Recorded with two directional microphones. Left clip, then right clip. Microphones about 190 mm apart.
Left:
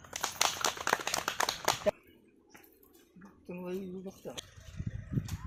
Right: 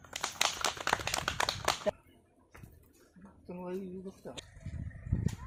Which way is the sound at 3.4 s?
35° left (ahead or behind).